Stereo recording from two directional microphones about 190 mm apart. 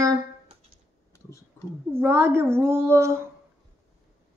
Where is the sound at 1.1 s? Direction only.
15° left (ahead or behind).